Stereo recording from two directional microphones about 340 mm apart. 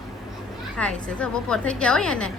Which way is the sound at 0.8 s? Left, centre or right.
Centre.